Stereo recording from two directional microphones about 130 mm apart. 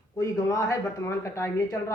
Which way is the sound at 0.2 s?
25° left (ahead or behind).